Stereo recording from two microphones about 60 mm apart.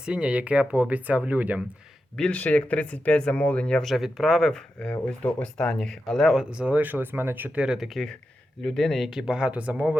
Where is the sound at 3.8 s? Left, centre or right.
Centre.